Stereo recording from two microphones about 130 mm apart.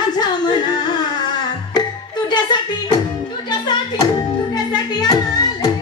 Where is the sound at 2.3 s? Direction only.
35° left (ahead or behind).